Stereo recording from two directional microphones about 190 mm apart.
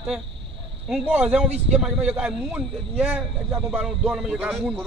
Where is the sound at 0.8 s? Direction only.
5° right (ahead or behind).